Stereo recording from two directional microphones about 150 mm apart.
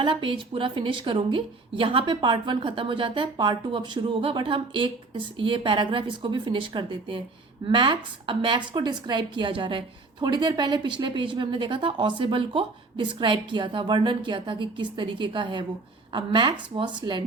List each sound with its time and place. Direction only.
0.0 s a woman's voice: 35° right (ahead or behind)